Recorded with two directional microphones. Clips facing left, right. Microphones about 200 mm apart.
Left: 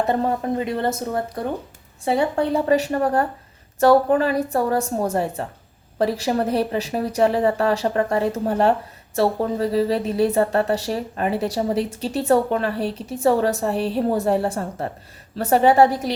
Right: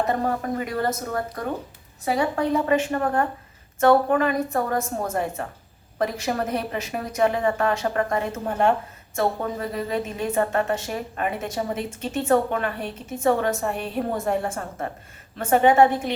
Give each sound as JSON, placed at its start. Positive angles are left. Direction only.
{"t": 0.1, "sound": "a woman's voice", "side_deg": 25}